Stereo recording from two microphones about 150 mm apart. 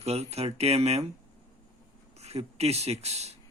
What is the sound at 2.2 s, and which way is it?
Speech, 45° right (ahead or behind).